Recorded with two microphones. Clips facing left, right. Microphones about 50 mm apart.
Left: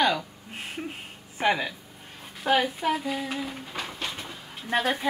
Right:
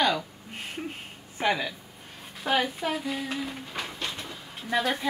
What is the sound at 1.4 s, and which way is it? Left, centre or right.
Speech, centre.